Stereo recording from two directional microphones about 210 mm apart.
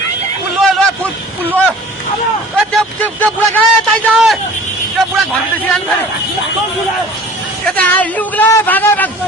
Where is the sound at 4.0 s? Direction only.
Centre (ahead or behind).